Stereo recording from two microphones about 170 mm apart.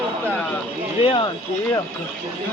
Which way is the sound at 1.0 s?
30° left (ahead or behind).